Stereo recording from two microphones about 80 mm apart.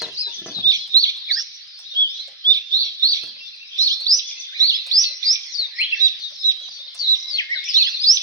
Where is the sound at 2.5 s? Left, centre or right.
Right.